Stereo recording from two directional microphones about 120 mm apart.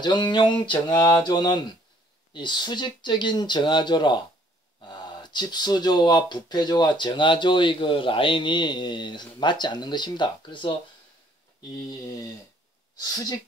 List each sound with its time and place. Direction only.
0.0 s speech: 40° left (ahead or behind)
11.7 s a woman's voice: 30° left (ahead or behind)